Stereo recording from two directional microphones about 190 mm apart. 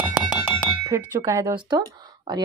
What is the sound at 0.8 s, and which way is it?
Speech, 15° right (ahead or behind).